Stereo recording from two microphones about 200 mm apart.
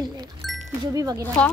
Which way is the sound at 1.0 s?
15° right (ahead or behind).